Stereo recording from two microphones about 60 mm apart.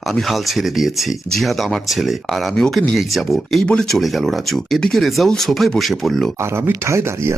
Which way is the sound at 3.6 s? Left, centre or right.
Centre.